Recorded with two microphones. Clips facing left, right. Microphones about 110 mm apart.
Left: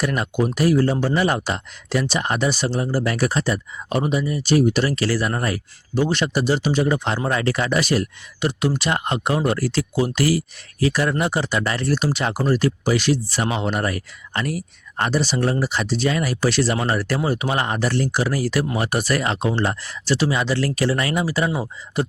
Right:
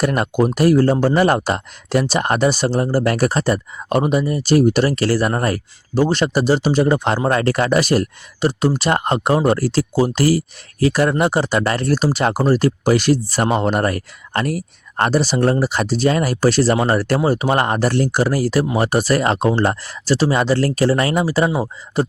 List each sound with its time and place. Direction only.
0.0 s speech: 45° right (ahead or behind)